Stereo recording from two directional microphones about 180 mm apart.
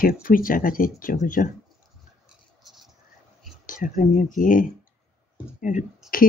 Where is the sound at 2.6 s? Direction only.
Centre (ahead or behind).